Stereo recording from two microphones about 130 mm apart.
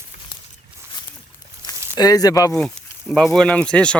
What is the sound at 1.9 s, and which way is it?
Speech, 30° left (ahead or behind).